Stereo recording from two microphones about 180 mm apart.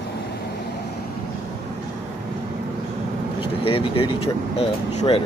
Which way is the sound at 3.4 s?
30° left (ahead or behind).